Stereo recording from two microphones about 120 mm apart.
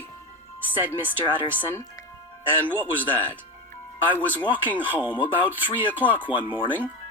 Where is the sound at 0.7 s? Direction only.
15° right (ahead or behind).